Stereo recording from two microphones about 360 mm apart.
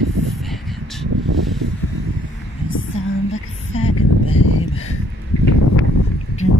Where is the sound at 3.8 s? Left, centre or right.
Left.